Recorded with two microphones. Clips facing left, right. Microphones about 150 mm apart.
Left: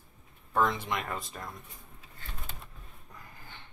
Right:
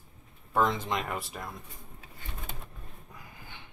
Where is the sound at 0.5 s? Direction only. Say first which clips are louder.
Right 1 dB; 20° right (ahead or behind).